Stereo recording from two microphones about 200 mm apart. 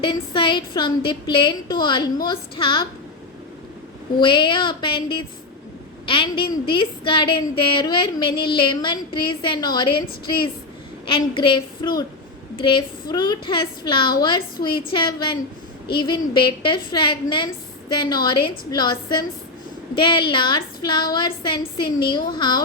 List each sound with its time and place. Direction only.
0.0 s a woman's voice: 25° left (ahead or behind)
4.2 s a woman's voice: 25° left (ahead or behind)
11.0 s a woman's voice: 25° left (ahead or behind)